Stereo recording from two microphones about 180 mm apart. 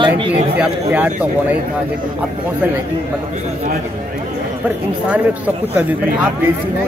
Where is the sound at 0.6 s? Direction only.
10° right (ahead or behind).